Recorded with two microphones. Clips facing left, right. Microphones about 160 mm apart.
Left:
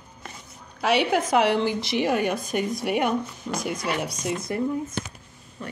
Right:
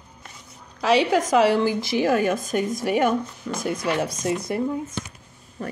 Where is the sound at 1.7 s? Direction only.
40° right (ahead or behind).